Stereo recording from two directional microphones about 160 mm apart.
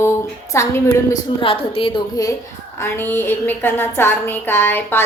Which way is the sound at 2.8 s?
15° left (ahead or behind).